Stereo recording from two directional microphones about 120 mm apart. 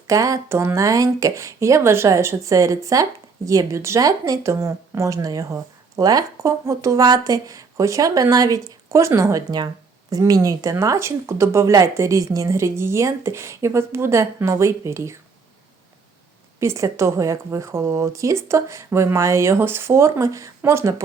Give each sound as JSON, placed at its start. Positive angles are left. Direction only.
{"t": 0.1, "sound": "speech", "side_deg": -25}
{"t": 16.6, "sound": "speech", "side_deg": -25}